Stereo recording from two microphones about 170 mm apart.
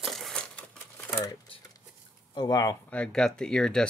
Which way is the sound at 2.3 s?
25° left (ahead or behind).